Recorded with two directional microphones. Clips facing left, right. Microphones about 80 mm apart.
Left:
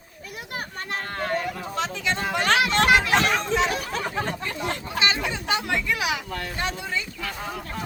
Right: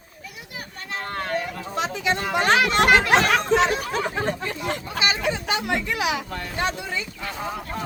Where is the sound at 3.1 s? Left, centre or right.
Right.